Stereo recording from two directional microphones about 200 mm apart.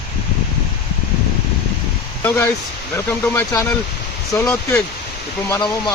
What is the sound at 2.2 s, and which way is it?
Speech, 10° left (ahead or behind).